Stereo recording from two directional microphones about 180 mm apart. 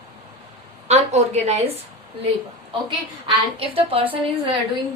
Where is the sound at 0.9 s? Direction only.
40° right (ahead or behind).